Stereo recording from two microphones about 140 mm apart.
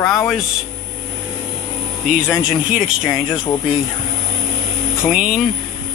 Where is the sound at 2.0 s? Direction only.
5° right (ahead or behind).